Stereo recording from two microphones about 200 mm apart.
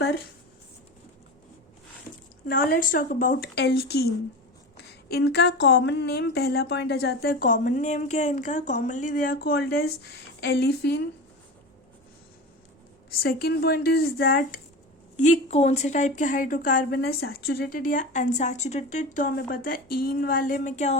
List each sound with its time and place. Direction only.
2.5 s a woman's voice: 45° left (ahead or behind)
13.1 s a woman's voice: 50° left (ahead or behind); by 21.0 s 35° left (ahead or behind)